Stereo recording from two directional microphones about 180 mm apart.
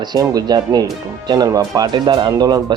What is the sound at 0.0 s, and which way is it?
Speech, 20° right (ahead or behind).